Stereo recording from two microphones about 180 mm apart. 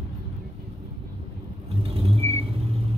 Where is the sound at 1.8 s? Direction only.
35° right (ahead or behind).